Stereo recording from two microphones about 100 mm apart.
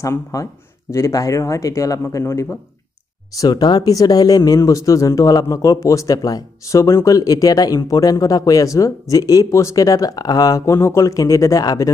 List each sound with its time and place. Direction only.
0.0 s a man's voice: 35° left (ahead or behind)